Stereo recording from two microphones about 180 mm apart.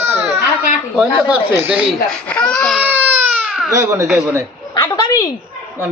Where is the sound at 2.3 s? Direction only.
5° left (ahead or behind).